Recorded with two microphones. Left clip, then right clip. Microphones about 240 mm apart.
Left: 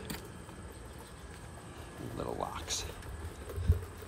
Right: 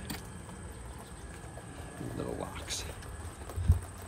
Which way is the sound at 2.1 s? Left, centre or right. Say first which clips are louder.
Left 2 dB; centre.